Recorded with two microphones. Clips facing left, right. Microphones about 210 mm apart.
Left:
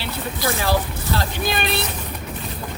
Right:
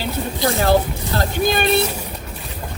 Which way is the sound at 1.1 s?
45° right (ahead or behind).